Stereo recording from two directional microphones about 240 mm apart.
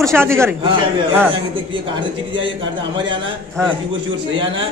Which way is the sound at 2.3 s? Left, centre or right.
Right.